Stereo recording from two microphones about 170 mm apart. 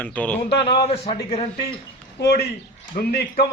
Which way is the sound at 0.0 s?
10° left (ahead or behind).